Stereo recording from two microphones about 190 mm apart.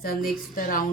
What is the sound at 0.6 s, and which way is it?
Speech, 45° left (ahead or behind).